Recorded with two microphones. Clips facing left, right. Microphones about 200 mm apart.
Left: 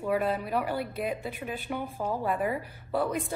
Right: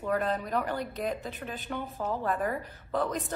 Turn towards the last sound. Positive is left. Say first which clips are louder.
# left 2 dB
turn(degrees=10)  # may be behind; listen again after turning